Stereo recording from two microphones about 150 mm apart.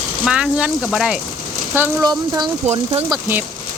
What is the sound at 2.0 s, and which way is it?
Speech, 30° right (ahead or behind).